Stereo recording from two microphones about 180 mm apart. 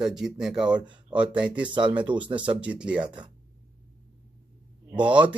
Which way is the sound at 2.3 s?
25° right (ahead or behind).